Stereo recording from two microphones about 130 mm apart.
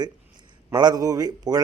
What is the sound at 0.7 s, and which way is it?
Speech, 30° right (ahead or behind).